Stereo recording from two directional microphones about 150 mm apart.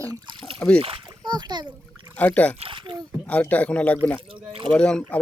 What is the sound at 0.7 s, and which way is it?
Splash, 35° right (ahead or behind).